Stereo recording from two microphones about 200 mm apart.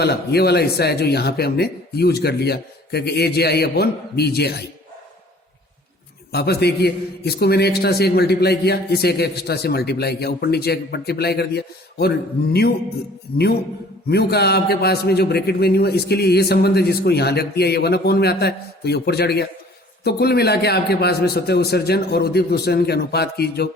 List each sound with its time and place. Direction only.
0.0 s a man's voice: 55° left (ahead or behind)
6.3 s a man's voice: 55° left (ahead or behind)
14.1 s a man's voice: 55° left (ahead or behind)